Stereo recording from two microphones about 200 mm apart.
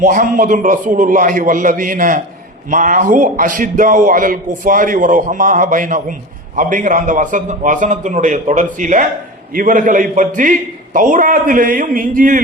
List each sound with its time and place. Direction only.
0.0 s a man's voice: 40° right (ahead or behind)